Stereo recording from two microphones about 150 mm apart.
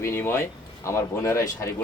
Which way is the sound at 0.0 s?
15° left (ahead or behind).